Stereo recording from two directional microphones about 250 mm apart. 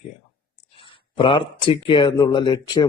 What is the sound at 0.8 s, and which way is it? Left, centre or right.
Speech, left.